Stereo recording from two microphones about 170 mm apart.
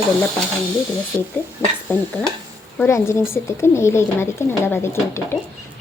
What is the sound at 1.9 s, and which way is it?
A woman's voice, 10° left (ahead or behind).